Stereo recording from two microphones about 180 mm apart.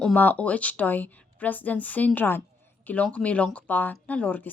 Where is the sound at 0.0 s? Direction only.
5° left (ahead or behind).